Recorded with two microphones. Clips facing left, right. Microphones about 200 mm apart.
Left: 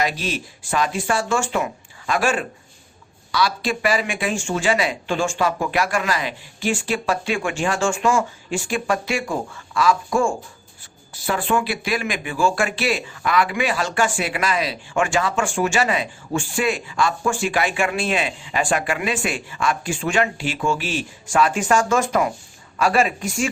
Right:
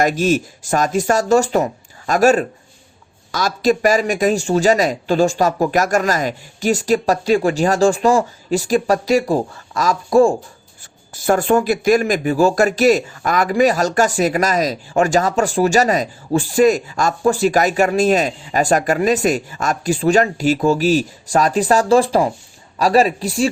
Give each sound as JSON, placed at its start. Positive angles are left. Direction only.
{"t": 0.0, "sound": "speech", "side_deg": -45}